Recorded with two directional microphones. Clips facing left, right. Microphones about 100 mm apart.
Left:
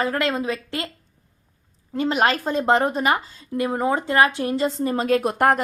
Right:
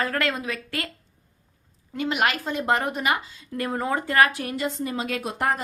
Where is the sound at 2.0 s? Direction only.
35° left (ahead or behind).